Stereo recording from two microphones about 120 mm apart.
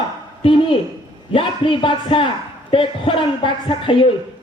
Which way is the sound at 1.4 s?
45° left (ahead or behind).